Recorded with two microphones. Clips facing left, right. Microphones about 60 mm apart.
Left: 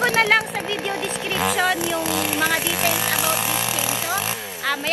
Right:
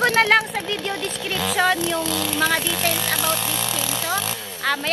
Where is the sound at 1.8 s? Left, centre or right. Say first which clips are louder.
Left 1 dB; centre.